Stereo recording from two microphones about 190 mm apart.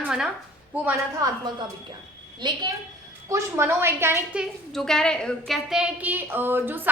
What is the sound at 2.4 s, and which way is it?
A woman's voice, 25° right (ahead or behind).